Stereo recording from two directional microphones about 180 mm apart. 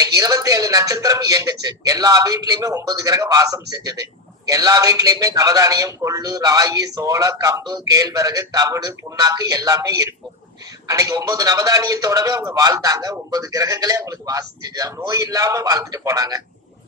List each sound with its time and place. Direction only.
0.0 s speech: 20° right (ahead or behind)